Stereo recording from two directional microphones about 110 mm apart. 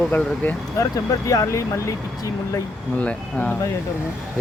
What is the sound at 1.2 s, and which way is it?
Speech, 30° left (ahead or behind).